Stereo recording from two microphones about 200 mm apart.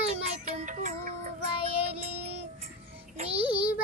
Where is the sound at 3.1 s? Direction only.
30° right (ahead or behind).